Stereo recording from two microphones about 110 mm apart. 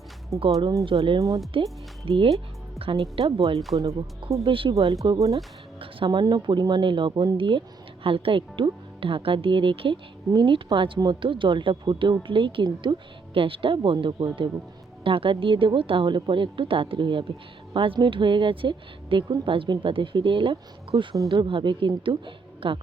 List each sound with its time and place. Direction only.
0.3 s speech: 30° right (ahead or behind)
0.9 s speech: 50° right (ahead or behind)
5.1 s speech: 30° right (ahead or behind); by 22.8 s 50° right (ahead or behind)